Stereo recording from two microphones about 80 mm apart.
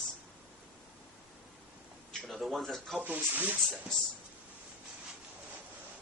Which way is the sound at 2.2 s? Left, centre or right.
Centre.